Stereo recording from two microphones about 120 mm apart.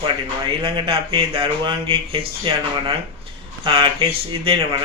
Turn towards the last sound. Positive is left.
turn(degrees=-45)  # may be behind; listen again after turning